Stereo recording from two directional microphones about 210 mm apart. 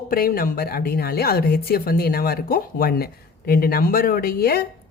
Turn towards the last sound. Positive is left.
turn(degrees=45)  # may be behind; listen again after turning